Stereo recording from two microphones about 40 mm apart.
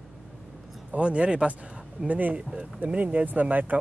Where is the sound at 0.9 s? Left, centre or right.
Right.